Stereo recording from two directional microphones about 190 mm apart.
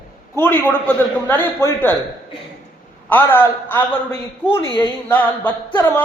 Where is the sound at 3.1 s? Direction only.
10° left (ahead or behind).